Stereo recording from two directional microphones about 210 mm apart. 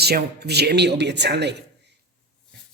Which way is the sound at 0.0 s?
50° right (ahead or behind).